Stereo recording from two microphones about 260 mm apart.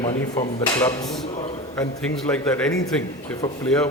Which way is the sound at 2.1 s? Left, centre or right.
Centre.